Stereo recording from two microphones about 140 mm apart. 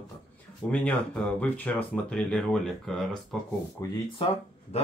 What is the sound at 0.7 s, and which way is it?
Speech, 10° left (ahead or behind).